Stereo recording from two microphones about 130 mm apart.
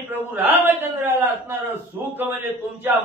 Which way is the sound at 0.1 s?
15° right (ahead or behind).